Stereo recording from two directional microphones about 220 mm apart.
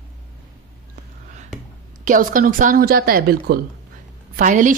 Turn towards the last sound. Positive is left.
turn(degrees=-40)  # may be behind; listen again after turning